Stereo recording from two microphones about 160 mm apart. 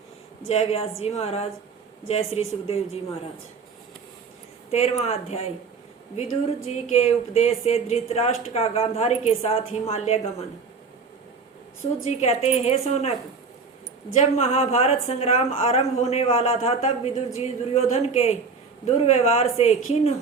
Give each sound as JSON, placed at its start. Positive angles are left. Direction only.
{"t": 0.4, "sound": "speech", "side_deg": 40}
{"t": 4.7, "sound": "speech", "side_deg": 40}
{"t": 6.7, "sound": "speech", "side_deg": 40}
{"t": 12.2, "sound": "speech", "side_deg": 40}
{"t": 14.2, "sound": "speech", "side_deg": 45}